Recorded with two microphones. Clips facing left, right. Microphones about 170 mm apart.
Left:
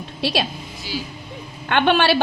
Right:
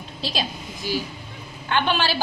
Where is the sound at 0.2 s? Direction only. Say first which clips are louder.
Left 6 dB; 65° left (ahead or behind).